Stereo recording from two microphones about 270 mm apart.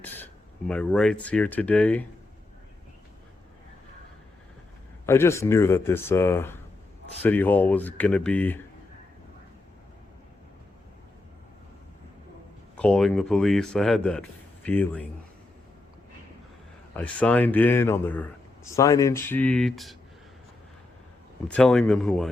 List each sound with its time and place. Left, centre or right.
0.7 s speech: centre
5.0 s speech: centre
12.7 s speech: centre
16.9 s speech: centre
21.4 s speech: centre